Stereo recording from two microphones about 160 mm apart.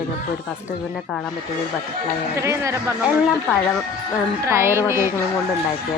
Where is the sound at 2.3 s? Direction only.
20° right (ahead or behind).